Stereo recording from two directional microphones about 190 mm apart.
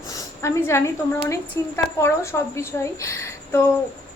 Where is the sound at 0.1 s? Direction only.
15° left (ahead or behind).